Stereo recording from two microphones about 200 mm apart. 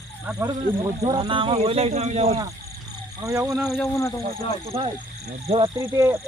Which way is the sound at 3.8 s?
15° left (ahead or behind).